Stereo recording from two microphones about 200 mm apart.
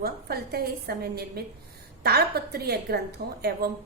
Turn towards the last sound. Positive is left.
turn(degrees=-50)  # may be behind; listen again after turning